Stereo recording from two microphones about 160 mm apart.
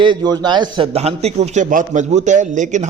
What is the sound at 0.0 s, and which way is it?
A man's voice, 25° right (ahead or behind).